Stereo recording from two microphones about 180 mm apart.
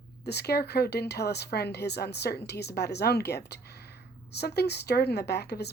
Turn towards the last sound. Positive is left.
turn(degrees=65)  # may be behind; listen again after turning